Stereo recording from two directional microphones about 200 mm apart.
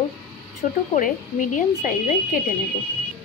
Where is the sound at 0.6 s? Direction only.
40° left (ahead or behind).